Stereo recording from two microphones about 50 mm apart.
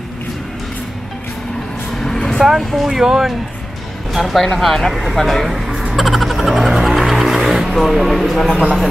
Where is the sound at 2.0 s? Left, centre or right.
Centre.